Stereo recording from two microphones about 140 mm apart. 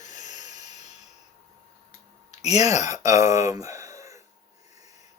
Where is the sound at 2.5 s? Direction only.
55° left (ahead or behind).